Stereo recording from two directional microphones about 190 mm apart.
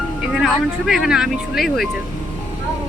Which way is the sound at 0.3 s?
Centre (ahead or behind).